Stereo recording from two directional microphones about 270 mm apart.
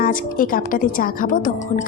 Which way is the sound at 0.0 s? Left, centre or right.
Left.